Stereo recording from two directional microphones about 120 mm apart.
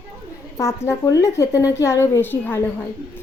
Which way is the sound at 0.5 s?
25° left (ahead or behind).